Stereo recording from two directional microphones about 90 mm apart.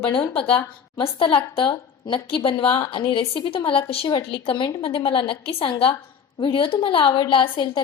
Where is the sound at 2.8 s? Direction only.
70° left (ahead or behind); by 5.9 s 90° left.